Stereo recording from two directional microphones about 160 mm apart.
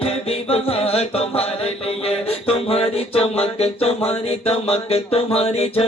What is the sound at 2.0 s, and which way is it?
Music, 40° left (ahead or behind).